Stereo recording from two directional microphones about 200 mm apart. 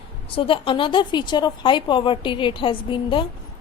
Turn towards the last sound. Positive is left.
turn(degrees=25)  # may be behind; listen again after turning